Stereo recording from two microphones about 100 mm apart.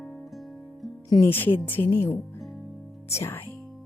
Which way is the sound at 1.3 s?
20° left (ahead or behind).